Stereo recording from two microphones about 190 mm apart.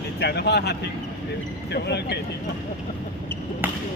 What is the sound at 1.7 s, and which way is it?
Speech, 60° left (ahead or behind).